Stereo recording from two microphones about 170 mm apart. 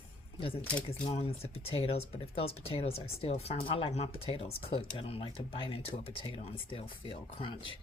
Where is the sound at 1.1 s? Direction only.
35° left (ahead or behind).